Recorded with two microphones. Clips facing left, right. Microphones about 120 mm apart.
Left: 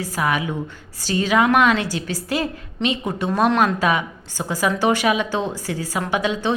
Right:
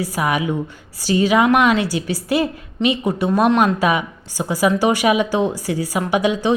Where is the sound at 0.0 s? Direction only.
10° right (ahead or behind).